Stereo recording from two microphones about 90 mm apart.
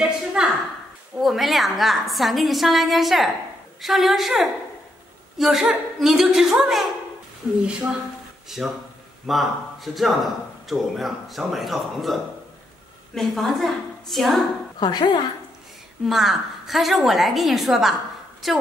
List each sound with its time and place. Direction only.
0.0 s a sound: 5° right (ahead or behind)
1.2 s a man's voice: centre (ahead or behind)
14.8 s speech: 55° left (ahead or behind)
16.1 s a man's voice: 5° right (ahead or behind)